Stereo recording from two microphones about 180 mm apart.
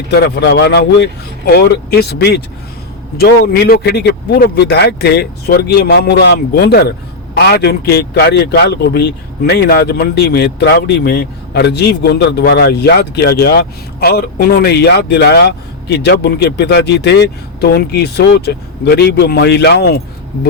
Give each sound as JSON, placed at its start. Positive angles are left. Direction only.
{"t": 0.1, "sound": "a man's voice", "side_deg": 65}